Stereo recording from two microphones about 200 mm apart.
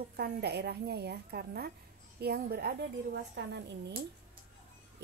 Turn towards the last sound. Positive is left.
turn(degrees=-60)  # may be behind; listen again after turning